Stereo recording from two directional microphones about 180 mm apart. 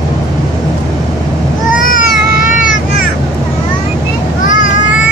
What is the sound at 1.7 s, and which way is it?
Baby cry, 50° left (ahead or behind).